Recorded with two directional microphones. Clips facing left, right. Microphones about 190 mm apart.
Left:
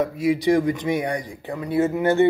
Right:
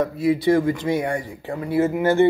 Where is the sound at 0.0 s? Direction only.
15° left (ahead or behind).